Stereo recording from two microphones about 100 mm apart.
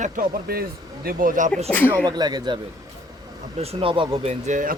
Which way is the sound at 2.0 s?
45° right (ahead or behind).